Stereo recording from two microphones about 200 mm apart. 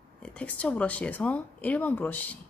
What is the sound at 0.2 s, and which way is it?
Speech, 5° left (ahead or behind).